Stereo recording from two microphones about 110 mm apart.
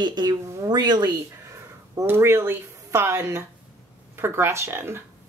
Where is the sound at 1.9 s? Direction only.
20° right (ahead or behind).